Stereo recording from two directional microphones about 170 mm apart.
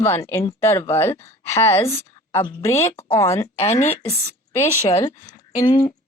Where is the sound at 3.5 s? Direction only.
40° left (ahead or behind).